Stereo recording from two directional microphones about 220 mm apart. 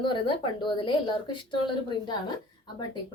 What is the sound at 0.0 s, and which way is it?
A woman's voice, 20° left (ahead or behind).